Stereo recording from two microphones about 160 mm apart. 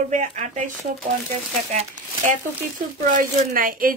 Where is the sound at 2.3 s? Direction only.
55° right (ahead or behind).